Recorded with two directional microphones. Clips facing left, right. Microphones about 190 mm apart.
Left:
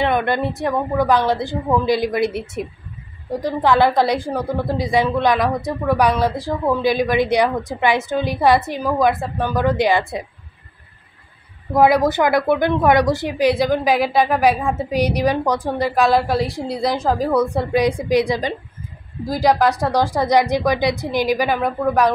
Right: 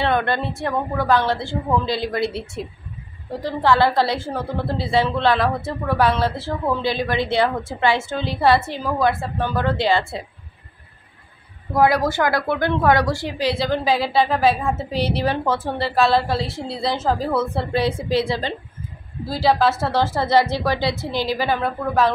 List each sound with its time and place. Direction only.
0.0 s a woman's voice: 15° left (ahead or behind)
11.7 s a woman's voice: 20° left (ahead or behind)